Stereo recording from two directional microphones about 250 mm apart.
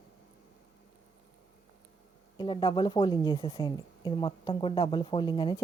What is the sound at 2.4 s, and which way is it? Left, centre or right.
A woman's voice, centre.